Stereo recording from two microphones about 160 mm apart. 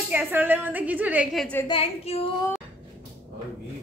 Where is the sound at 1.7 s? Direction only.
40° left (ahead or behind).